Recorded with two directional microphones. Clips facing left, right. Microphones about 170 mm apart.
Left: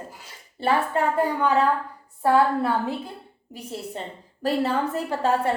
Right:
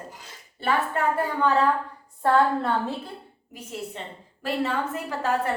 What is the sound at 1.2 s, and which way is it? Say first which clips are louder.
A woman's voice: left 1 dB; 10° left (ahead or behind).